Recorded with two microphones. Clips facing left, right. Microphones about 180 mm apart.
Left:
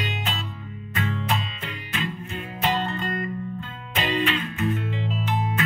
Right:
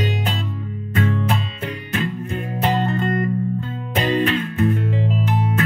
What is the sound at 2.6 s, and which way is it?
Music, 50° right (ahead or behind).